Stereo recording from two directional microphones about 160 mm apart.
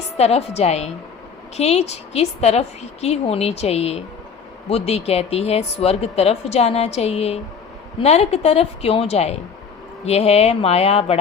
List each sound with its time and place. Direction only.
0.2 s speech: 40° left (ahead or behind)